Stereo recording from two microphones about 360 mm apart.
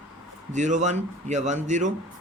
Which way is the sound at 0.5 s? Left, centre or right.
Centre.